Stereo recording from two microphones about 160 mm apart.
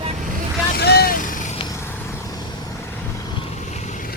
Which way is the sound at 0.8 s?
90° left.